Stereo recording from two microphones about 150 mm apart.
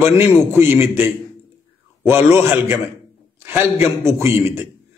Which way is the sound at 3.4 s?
15° right (ahead or behind).